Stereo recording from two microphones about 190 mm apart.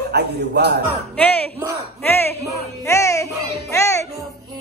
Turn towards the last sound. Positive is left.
turn(degrees=15)  # may be behind; listen again after turning